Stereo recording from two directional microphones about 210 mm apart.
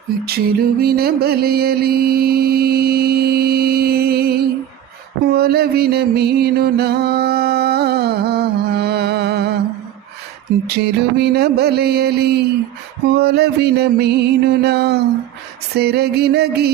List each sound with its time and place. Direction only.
0.3 s music: 45° right (ahead or behind)
5.2 s mantra: 45° right (ahead or behind)
10.7 s music: 50° right (ahead or behind)